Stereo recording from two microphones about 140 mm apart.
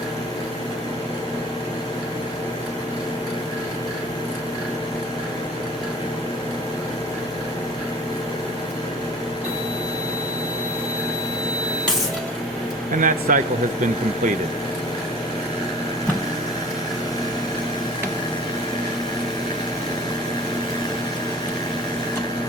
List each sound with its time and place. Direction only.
13.0 s speech: 70° right (ahead or behind)